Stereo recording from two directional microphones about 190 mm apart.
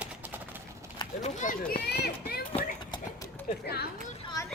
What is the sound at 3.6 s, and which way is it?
Speech, 60° left (ahead or behind).